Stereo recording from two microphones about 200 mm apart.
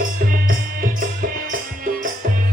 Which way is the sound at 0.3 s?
45° right (ahead or behind).